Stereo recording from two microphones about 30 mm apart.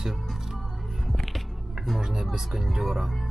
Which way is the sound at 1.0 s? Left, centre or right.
Centre.